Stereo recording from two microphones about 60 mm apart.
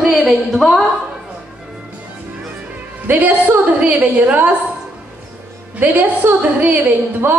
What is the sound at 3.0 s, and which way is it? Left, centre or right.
A woman's voice, right.